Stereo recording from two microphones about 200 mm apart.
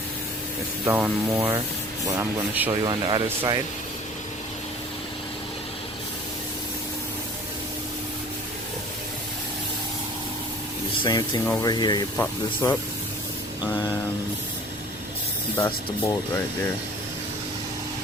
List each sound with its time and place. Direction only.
0.9 s a man's voice: 10° right (ahead or behind)
11.0 s speech: 20° left (ahead or behind)
12.1 s speech: 10° left (ahead or behind)
15.5 s speech: 15° left (ahead or behind)